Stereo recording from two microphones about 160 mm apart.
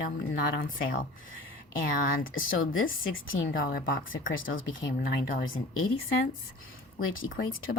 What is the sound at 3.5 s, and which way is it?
Speech, 65° left (ahead or behind).